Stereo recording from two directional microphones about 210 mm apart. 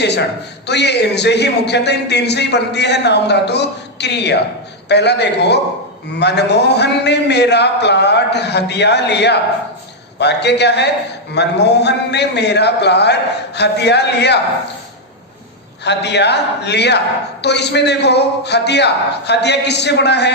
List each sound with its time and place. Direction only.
0.0 s a man's voice: 55° left (ahead or behind)
15.8 s a man's voice: 55° left (ahead or behind)